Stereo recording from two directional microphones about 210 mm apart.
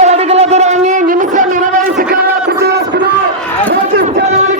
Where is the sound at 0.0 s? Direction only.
30° right (ahead or behind).